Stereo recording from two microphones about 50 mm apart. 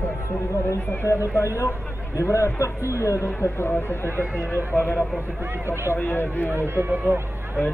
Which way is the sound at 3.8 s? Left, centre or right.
Left.